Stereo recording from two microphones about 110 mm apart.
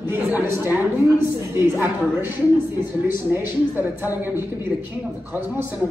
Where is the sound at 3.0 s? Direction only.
20° right (ahead or behind).